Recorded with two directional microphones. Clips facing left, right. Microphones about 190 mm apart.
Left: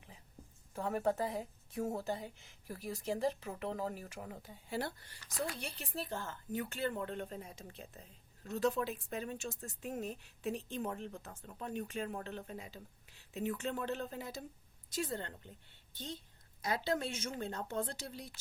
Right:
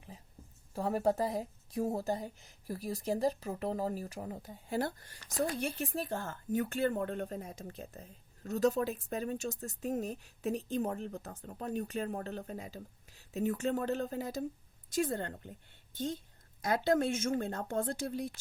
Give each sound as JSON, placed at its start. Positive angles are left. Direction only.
{"t": 0.7, "sound": "a woman's voice", "side_deg": -35}